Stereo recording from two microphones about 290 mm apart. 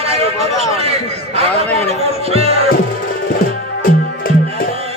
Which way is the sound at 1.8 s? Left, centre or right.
Right.